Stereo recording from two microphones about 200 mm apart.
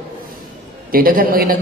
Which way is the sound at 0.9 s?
45° right (ahead or behind).